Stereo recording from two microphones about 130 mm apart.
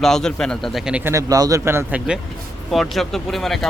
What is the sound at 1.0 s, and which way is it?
A man's voice, 25° right (ahead or behind).